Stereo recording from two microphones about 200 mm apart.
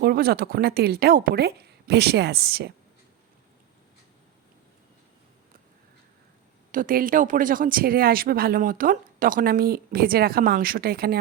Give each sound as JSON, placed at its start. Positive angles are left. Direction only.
{"t": 0.0, "sound": "speech", "side_deg": -50}
{"t": 6.7, "sound": "speech", "side_deg": -45}